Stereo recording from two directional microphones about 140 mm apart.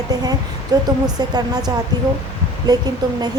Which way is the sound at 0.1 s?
30° right (ahead or behind).